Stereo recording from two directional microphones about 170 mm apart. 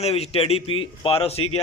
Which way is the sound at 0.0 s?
35° left (ahead or behind).